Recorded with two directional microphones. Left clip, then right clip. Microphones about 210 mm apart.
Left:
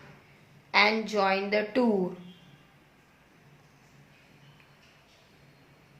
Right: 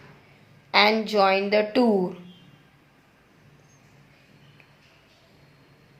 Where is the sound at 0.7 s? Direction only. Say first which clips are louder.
Right 4 dB; 25° right (ahead or behind).